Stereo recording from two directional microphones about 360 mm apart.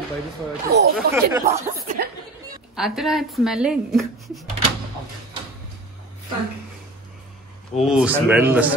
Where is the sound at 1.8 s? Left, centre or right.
Right.